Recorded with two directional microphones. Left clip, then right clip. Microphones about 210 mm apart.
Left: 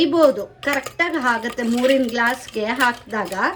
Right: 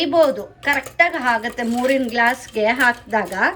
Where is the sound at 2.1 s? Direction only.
10° left (ahead or behind).